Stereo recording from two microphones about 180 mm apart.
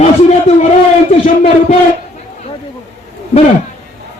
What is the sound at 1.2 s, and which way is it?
Speech, 45° left (ahead or behind).